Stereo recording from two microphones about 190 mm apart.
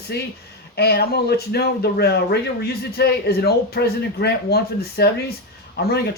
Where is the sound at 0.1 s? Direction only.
60° left (ahead or behind).